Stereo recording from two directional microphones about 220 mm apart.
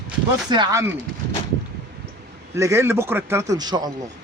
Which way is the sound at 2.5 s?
15° right (ahead or behind).